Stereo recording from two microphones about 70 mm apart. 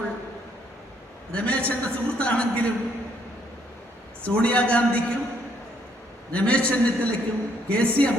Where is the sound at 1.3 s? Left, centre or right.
Centre.